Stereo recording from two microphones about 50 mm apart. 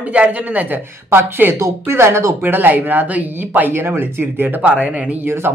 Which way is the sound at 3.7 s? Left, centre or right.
Right.